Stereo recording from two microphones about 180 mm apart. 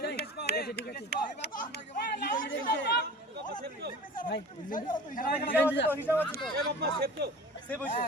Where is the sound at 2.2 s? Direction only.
50° left (ahead or behind).